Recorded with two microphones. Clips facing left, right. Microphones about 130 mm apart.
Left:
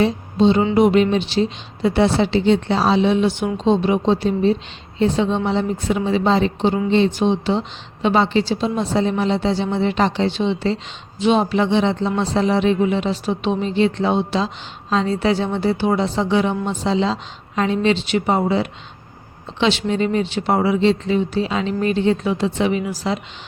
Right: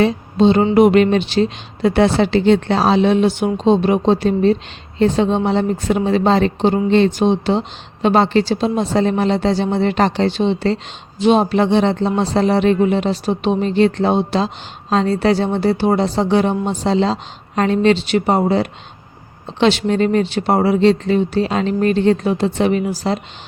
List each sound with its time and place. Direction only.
0.0 s speech: 60° right (ahead or behind)